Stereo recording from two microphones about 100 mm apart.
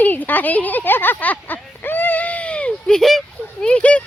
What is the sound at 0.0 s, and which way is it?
Speech, 15° left (ahead or behind).